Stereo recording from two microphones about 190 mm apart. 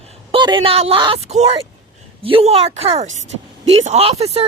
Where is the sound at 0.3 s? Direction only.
25° right (ahead or behind).